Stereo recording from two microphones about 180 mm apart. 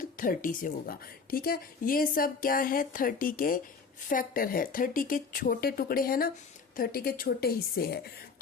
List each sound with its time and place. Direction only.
0.0 s a woman's voice: 50° left (ahead or behind)